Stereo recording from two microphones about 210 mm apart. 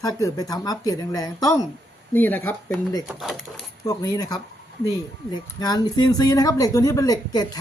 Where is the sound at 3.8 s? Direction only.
15° left (ahead or behind).